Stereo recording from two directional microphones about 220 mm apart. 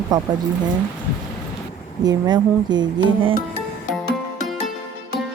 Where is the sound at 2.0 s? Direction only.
20° right (ahead or behind).